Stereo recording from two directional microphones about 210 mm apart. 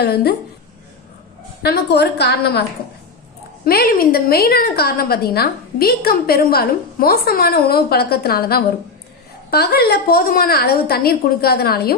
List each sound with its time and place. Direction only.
0.0 s a woman's voice: 50° left (ahead or behind)
1.6 s a woman's voice: 50° left (ahead or behind)
3.6 s a woman's voice: 45° left (ahead or behind)